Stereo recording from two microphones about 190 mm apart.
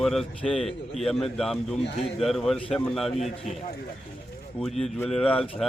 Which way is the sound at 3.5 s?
40° left (ahead or behind).